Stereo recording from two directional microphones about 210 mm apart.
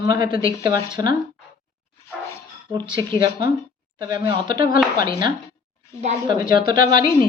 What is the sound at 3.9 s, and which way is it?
Speech, 20° right (ahead or behind).